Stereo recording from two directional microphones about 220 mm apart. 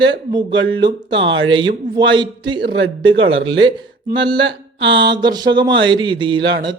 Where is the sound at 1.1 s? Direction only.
55° right (ahead or behind).